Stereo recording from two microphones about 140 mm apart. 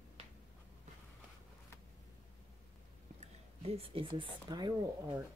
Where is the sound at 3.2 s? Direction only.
45° right (ahead or behind).